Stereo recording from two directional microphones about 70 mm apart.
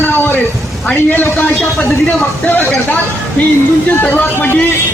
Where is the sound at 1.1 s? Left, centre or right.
Left.